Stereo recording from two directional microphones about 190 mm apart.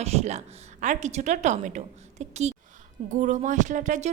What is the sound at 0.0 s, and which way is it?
A woman's voice, 35° right (ahead or behind).